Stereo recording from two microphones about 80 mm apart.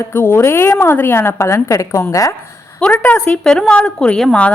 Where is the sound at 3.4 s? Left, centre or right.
Centre.